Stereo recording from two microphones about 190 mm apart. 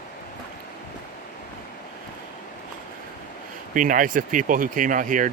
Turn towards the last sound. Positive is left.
turn(degrees=-45)  # may be behind; listen again after turning